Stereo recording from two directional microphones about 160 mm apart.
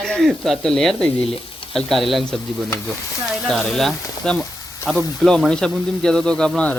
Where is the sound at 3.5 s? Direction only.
Centre (ahead or behind).